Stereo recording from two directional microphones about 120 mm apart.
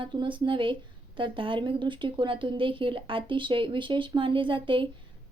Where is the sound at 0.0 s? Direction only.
45° right (ahead or behind).